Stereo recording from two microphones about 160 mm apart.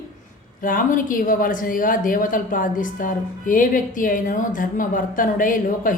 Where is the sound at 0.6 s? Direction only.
55° left (ahead or behind).